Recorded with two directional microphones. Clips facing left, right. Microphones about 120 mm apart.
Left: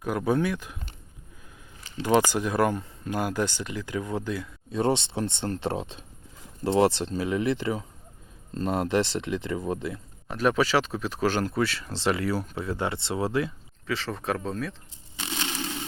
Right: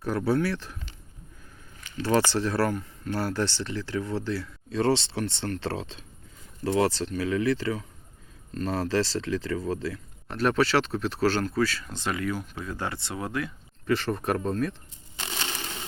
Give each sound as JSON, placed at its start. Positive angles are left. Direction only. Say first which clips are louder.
{"t": 0.0, "sound": "speech", "louder": "even", "side_deg": 10}
{"t": 2.0, "sound": "speech", "louder": "left 1 dB", "side_deg": 15}
{"t": 10.2, "sound": "speech", "louder": "even", "side_deg": 10}
{"t": 11.4, "sound": "speech", "louder": "right 1 dB", "side_deg": 25}
{"t": 13.8, "sound": "speech", "louder": "right 3 dB", "side_deg": 0}